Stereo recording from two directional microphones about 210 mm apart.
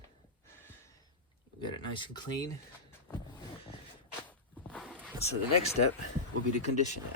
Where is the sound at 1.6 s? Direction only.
20° left (ahead or behind).